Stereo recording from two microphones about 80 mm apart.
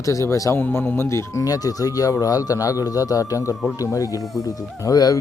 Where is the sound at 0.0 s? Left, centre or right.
Left.